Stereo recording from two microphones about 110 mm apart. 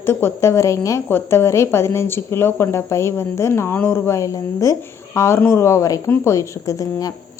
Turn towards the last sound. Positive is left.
turn(degrees=30)  # may be behind; listen again after turning